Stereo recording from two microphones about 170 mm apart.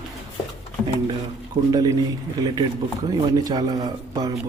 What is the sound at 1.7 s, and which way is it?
A man's voice, 20° right (ahead or behind).